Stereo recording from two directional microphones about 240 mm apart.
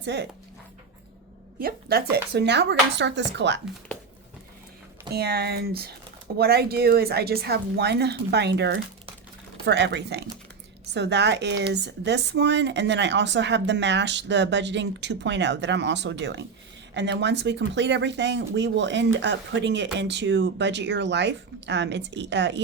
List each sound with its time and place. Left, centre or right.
0.0 s speech: right
1.5 s a woman's voice: right
5.1 s a woman's voice: right